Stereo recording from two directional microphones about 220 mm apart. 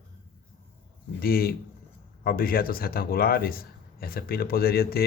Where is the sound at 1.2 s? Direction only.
40° left (ahead or behind).